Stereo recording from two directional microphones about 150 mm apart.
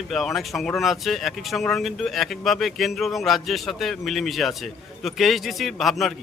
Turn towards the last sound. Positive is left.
turn(degrees=0)  # may be behind; listen again after turning